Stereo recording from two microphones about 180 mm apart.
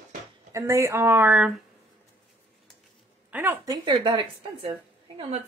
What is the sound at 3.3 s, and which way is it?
Speech, 10° right (ahead or behind).